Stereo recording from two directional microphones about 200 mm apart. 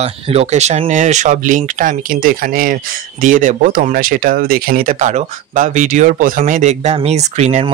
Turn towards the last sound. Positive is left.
turn(degrees=-35)  # may be behind; listen again after turning